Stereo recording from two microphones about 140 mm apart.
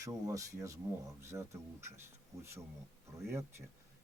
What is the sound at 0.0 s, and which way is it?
Speech, 20° right (ahead or behind).